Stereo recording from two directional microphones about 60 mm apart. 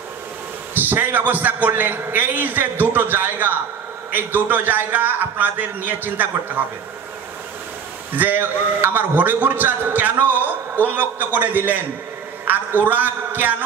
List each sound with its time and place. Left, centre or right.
0.7 s a man's voice: right
8.2 s a man's voice: right